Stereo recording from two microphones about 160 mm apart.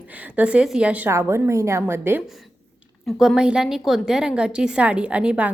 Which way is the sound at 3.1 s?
5° right (ahead or behind).